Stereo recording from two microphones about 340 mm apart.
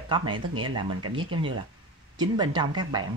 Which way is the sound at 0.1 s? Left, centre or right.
Centre.